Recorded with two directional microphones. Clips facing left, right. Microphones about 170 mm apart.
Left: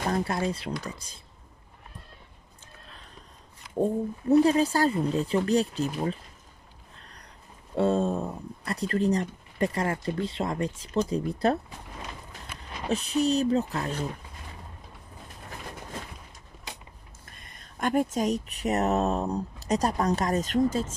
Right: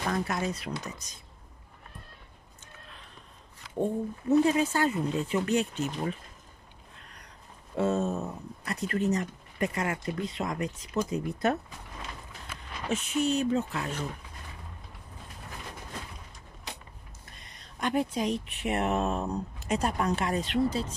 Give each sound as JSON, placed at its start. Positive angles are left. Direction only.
{"t": 0.1, "sound": "speech", "side_deg": 30}
{"t": 3.8, "sound": "speech", "side_deg": 35}
{"t": 7.0, "sound": "a sound", "side_deg": 35}
{"t": 7.7, "sound": "speech", "side_deg": 30}
{"t": 12.8, "sound": "speech", "side_deg": 35}
{"t": 17.3, "sound": "speech", "side_deg": 50}